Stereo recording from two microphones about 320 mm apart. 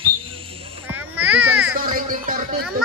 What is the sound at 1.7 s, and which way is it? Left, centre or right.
Speech, right.